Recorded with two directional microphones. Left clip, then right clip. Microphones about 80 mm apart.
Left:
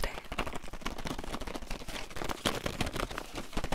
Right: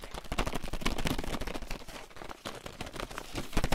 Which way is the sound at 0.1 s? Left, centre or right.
Right.